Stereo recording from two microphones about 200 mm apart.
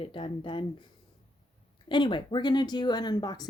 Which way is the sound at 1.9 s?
25° left (ahead or behind).